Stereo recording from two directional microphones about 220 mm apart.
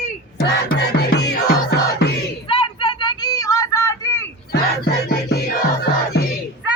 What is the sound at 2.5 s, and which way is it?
Vehicle, 25° left (ahead or behind).